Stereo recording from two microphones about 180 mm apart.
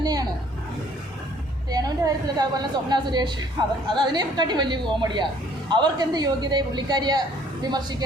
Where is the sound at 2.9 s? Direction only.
25° right (ahead or behind).